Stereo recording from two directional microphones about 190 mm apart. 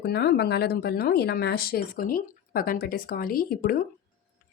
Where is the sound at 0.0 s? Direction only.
60° left (ahead or behind).